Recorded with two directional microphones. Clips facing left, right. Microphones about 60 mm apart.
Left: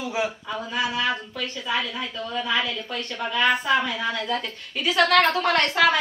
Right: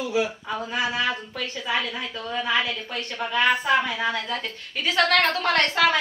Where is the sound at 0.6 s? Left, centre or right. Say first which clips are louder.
Even; right.